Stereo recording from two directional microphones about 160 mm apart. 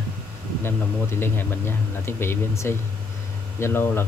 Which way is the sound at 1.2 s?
15° left (ahead or behind).